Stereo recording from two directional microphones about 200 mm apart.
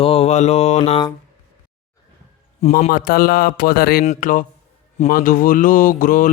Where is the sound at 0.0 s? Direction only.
30° left (ahead or behind).